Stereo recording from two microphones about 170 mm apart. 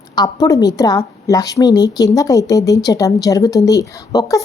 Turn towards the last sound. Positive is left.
turn(degrees=20)  # may be behind; listen again after turning